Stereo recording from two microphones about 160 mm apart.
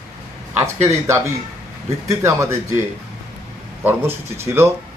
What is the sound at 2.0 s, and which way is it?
Speech, 15° right (ahead or behind).